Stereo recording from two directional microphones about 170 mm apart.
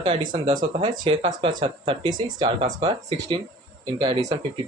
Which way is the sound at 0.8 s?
35° right (ahead or behind).